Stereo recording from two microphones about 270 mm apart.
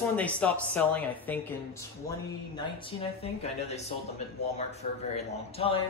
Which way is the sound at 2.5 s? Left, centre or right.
Left.